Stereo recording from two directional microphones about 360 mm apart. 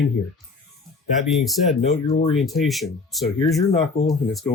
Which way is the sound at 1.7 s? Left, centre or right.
Centre.